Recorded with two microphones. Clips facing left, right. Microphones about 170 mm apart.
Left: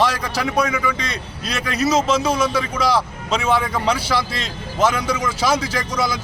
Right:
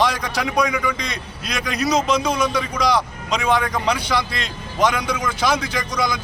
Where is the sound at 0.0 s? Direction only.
Centre (ahead or behind).